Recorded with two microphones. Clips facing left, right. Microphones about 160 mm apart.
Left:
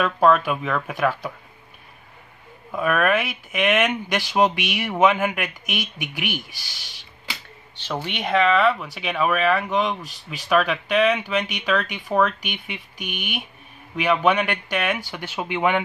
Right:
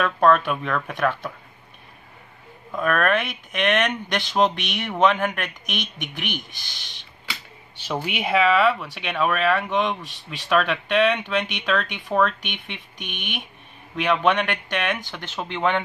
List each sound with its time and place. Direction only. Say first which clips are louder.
0.0 s speech: even; 5° left (ahead or behind)
2.7 s speech: left 1 dB; 5° left (ahead or behind)
7.7 s speech: right 1 dB; 10° right (ahead or behind); by 15.8 s 10° left (ahead or behind)